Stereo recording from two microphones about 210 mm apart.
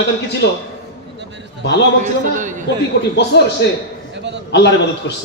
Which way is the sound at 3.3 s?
55° left (ahead or behind).